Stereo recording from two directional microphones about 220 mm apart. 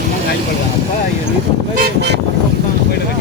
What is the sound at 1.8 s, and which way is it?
Vehicle, 50° right (ahead or behind).